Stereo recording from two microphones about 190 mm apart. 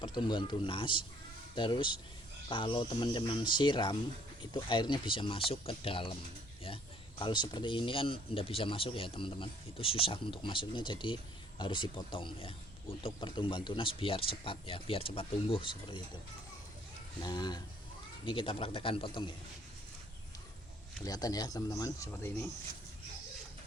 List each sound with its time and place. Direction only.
0.0 s speech: 25° left (ahead or behind)
7.2 s speech: 25° left (ahead or behind)
17.2 s speech: 20° left (ahead or behind)
21.0 s speech: 20° left (ahead or behind)